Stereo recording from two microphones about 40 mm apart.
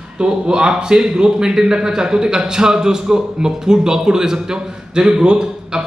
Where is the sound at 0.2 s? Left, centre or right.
Right.